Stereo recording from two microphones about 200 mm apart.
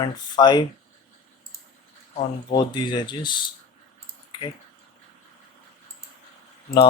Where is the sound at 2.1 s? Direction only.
25° left (ahead or behind).